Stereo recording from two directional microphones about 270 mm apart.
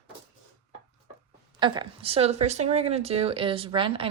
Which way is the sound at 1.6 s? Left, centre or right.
Centre.